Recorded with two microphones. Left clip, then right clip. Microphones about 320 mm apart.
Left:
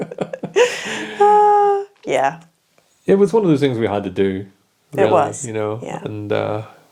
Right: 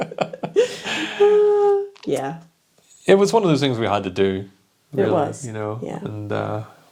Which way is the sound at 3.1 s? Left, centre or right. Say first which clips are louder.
Left 1 dB; right.